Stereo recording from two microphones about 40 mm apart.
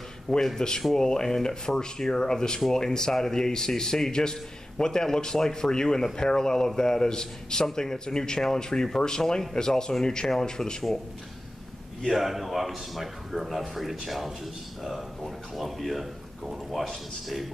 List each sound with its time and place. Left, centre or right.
0.6 s a man's voice: centre
12.1 s speech: centre